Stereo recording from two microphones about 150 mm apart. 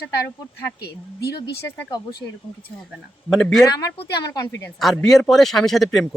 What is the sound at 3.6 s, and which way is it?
Speech, 25° left (ahead or behind).